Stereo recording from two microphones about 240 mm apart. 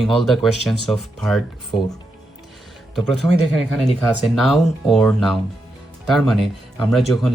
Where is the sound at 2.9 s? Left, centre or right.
Centre.